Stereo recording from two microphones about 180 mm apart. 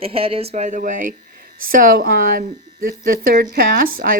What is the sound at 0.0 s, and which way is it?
Speech, 30° right (ahead or behind).